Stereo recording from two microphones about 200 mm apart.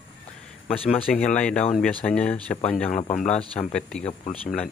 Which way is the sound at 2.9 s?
40° left (ahead or behind).